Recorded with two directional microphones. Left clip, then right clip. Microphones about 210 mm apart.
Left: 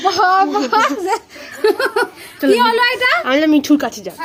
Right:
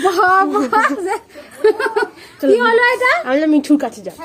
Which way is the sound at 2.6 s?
50° left (ahead or behind).